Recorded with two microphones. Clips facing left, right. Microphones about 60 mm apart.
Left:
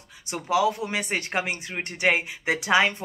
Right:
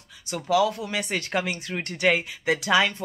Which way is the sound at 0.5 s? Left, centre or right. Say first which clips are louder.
Even; left.